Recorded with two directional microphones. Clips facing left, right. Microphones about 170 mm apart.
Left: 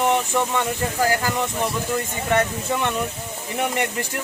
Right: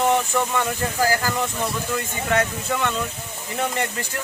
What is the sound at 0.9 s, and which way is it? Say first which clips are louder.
Speech: even; 25° left (ahead or behind).